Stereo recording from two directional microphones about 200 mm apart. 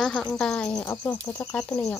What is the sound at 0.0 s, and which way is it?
Speech, 5° left (ahead or behind).